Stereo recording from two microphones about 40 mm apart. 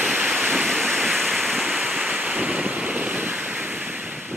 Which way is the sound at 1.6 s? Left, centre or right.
Right.